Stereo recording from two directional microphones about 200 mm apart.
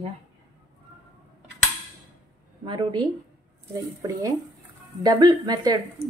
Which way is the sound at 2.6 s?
25° right (ahead or behind).